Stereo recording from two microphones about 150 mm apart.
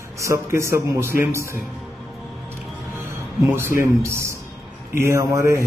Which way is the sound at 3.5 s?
15° right (ahead or behind).